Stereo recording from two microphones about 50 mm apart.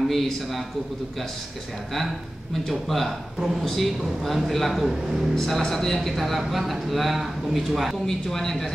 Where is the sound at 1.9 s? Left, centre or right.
Centre.